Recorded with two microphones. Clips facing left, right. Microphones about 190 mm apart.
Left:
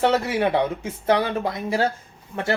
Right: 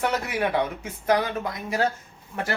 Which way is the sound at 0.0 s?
30° left (ahead or behind).